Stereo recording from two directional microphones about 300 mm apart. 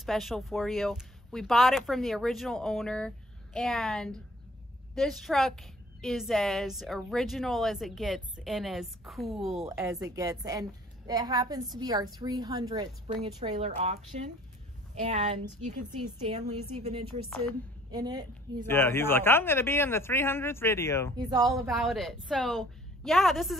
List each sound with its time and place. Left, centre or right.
0.0 s a woman's voice: centre; by 13.9 s right
15.0 s a woman's voice: right
18.7 s a man's voice: centre
21.2 s speech: centre
21.6 s a woman's voice: centre